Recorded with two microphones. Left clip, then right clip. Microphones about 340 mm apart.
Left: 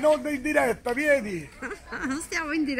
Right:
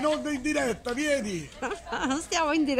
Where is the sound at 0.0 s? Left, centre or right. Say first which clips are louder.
Left 4 dB; left.